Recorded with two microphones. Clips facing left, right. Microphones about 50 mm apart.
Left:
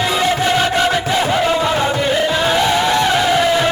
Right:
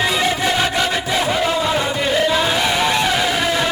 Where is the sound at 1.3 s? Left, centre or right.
Centre.